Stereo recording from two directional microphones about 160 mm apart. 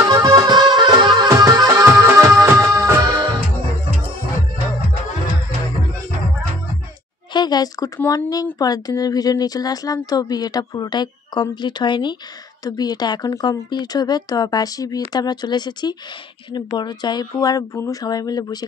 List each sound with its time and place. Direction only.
0.0 s music: 25° right (ahead or behind)
7.3 s a sound: 25° left (ahead or behind)
8.0 s speech: 20° left (ahead or behind)